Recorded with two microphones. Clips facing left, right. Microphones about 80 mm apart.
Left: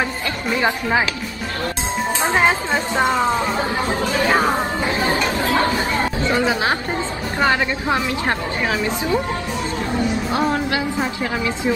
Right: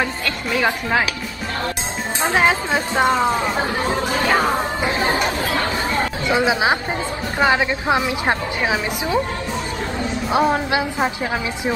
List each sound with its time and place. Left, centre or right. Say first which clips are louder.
2.3 s a woman's voice: right 1 dB; centre
3.2 s speech: even; centre
4.3 s speech: even; centre
4.8 s chatter: right 1 dB; right
6.2 s a woman's voice: right 2 dB; centre
10.3 s speech: right 5 dB; right